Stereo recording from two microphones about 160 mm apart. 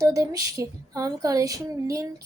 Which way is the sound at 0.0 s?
20° right (ahead or behind).